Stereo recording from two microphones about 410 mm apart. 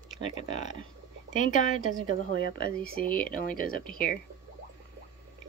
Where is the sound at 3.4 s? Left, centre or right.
Left.